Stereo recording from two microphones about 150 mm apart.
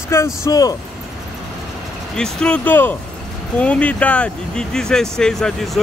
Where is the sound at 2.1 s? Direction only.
5° left (ahead or behind).